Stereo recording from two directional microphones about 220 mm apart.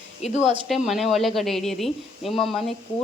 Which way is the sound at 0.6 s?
Centre (ahead or behind).